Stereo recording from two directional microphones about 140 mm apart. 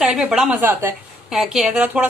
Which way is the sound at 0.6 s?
15° right (ahead or behind).